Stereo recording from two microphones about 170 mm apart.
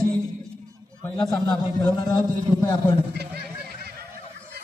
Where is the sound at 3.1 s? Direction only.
70° right (ahead or behind).